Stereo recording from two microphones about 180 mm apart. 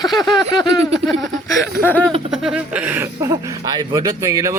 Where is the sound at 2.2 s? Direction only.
5° right (ahead or behind).